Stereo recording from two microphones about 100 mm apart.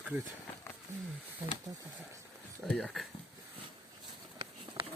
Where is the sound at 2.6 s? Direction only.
5° left (ahead or behind).